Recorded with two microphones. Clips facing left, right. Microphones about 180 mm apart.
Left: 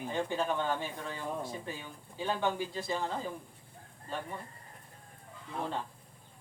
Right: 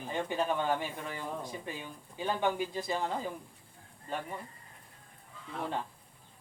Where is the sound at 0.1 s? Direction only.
15° right (ahead or behind).